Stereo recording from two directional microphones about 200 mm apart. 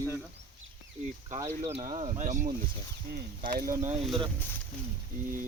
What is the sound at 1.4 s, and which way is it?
Speech, 30° right (ahead or behind).